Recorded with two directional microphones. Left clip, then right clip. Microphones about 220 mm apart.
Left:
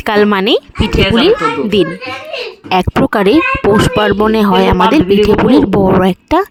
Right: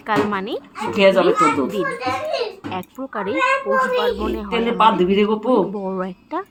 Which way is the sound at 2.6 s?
55° left (ahead or behind).